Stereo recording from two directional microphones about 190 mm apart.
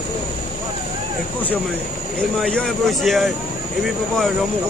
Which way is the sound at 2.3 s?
5° left (ahead or behind).